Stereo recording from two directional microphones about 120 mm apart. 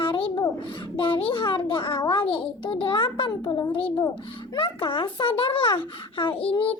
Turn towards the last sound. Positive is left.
turn(degrees=45)  # may be behind; listen again after turning